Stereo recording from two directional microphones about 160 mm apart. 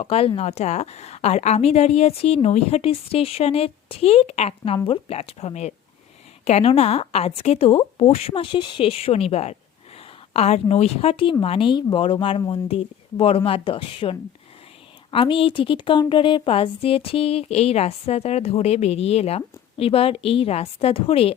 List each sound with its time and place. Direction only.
0.0 s a woman's voice: 35° left (ahead or behind)